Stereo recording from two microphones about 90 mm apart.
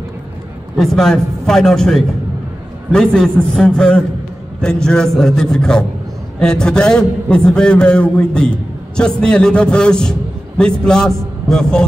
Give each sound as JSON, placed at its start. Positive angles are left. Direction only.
{"t": 0.7, "sound": "a man's voice", "side_deg": 5}